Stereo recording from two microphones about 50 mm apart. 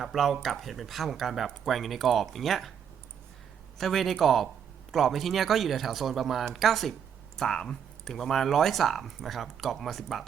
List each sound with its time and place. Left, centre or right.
0.0 s speech: centre
3.8 s speech: centre